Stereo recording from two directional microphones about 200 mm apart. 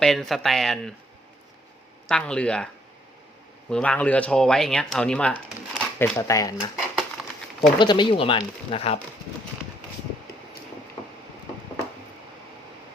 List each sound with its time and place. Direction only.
0.0 s speech: centre (ahead or behind)
2.0 s speech: 5° left (ahead or behind)
3.7 s speech: 5° left (ahead or behind)
6.9 s a sound: centre (ahead or behind)
7.8 s speech: 25° left (ahead or behind)